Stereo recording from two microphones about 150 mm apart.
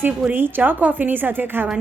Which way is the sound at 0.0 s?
15° right (ahead or behind).